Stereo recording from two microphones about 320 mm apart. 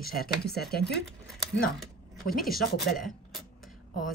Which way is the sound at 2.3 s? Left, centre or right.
Centre.